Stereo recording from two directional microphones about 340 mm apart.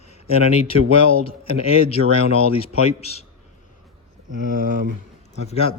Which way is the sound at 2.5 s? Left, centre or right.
Centre.